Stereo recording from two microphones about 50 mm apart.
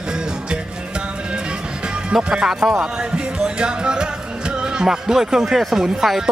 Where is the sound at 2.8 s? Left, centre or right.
Centre.